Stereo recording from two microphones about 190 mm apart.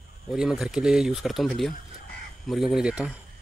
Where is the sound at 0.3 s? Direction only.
5° right (ahead or behind).